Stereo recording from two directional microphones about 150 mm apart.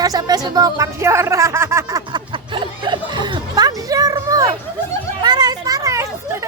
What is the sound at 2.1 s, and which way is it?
Music, 35° right (ahead or behind).